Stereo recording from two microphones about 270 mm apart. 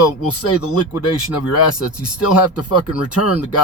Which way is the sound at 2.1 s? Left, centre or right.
Left.